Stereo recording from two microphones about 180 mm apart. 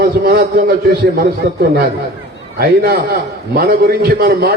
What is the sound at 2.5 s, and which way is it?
A man's voice, 55° right (ahead or behind).